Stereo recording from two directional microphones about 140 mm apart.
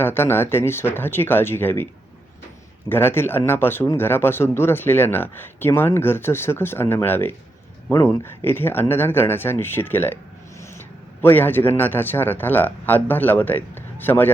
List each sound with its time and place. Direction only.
0.0 s speech: 15° left (ahead or behind)
2.9 s a man's voice: 15° left (ahead or behind)